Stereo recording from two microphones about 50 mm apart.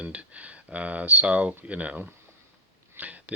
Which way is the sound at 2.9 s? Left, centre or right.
Right.